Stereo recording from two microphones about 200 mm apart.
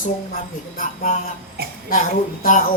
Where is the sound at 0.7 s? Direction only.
40° left (ahead or behind).